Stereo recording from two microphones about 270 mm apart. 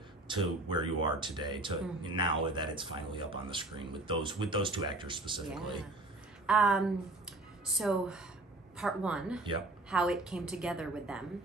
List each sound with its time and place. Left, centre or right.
0.3 s speech: centre
6.4 s a woman's voice: centre